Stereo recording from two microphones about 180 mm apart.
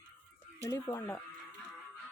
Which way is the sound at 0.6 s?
15° left (ahead or behind).